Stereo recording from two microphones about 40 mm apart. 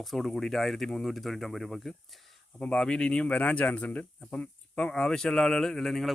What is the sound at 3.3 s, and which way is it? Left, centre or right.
Speech, left.